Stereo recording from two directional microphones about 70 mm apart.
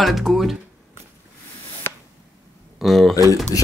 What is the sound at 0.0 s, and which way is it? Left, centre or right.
Speech, centre.